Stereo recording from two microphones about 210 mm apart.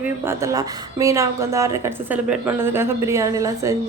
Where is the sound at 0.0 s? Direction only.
10° right (ahead or behind).